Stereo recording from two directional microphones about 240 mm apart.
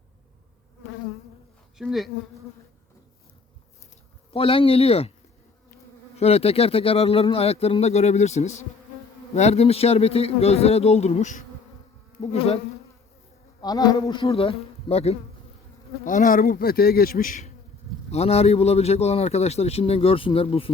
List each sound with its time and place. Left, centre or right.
1.8 s insect: centre
4.3 s a man's voice: left
6.1 s a man's voice: left
13.6 s a man's voice: centre
16.0 s insect: left
18.1 s a man's voice: left